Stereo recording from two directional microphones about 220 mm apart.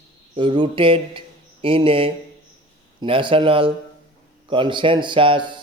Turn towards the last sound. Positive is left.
turn(degrees=-20)  # may be behind; listen again after turning